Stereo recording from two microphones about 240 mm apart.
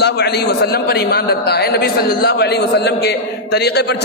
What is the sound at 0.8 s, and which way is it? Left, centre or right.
A man's voice, left.